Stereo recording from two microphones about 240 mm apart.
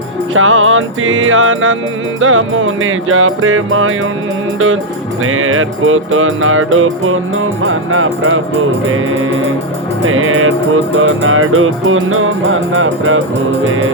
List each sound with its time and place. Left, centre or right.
0.3 s music: right
5.2 s music: right
10.1 s music: right